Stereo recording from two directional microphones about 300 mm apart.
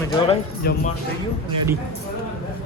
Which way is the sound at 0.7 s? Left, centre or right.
Left.